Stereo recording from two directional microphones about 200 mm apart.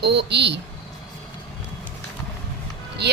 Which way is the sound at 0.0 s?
55° right (ahead or behind).